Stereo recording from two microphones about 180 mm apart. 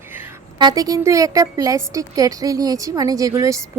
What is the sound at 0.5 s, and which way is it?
Speech, 20° right (ahead or behind).